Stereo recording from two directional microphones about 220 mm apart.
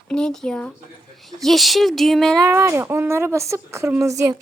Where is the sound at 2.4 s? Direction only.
10° right (ahead or behind).